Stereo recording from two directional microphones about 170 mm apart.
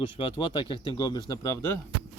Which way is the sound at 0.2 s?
30° left (ahead or behind).